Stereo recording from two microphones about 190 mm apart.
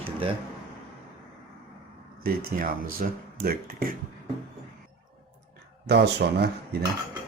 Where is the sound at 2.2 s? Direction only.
50° right (ahead or behind).